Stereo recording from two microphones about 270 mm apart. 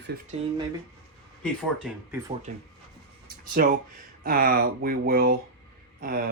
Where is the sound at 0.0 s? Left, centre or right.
Right.